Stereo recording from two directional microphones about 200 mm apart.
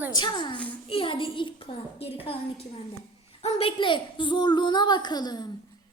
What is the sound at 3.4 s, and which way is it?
A woman's voice, 30° left (ahead or behind).